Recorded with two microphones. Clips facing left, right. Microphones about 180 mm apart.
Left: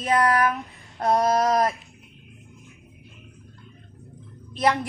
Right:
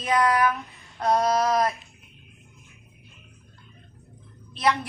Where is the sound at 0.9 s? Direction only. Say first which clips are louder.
Left 1 dB; 25° left (ahead or behind).